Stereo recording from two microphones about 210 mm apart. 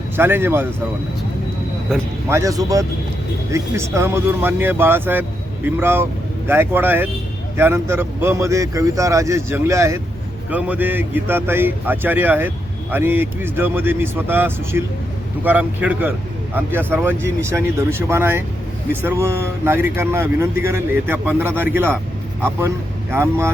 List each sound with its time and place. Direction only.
0.2 s speech: 10° right (ahead or behind)
1.9 s speech: centre (ahead or behind)
2.3 s speech: 15° right (ahead or behind)
23.1 s speech: 10° right (ahead or behind)